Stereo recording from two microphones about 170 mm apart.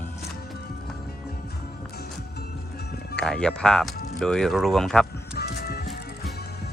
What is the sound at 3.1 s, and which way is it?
Speech, 5° left (ahead or behind).